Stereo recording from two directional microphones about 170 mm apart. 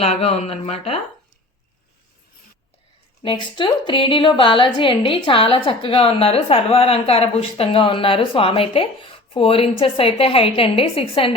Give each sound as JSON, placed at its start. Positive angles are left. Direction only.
{"t": 0.0, "sound": "a woman's voice", "side_deg": 40}
{"t": 3.2, "sound": "a woman's voice", "side_deg": 30}